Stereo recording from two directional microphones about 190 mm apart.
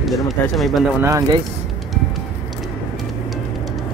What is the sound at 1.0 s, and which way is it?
Speech, 15° right (ahead or behind).